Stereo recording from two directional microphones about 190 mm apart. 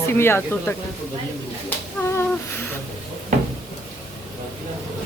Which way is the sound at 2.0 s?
15° left (ahead or behind).